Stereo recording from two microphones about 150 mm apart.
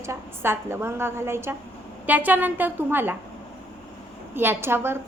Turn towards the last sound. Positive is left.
turn(degrees=-15)  # may be behind; listen again after turning